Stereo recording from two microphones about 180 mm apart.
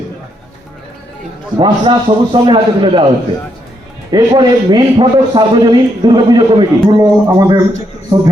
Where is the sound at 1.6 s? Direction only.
25° right (ahead or behind).